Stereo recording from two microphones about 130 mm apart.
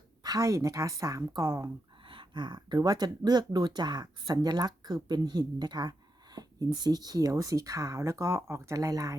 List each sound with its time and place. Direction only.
0.2 s speech: 30° right (ahead or behind)
2.0 s speech: 40° right (ahead or behind)